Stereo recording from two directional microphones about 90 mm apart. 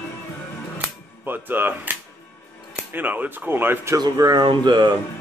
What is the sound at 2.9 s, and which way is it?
Speech, 20° right (ahead or behind).